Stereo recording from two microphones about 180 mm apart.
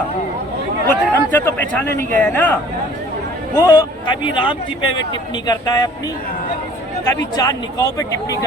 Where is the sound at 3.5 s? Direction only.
20° left (ahead or behind).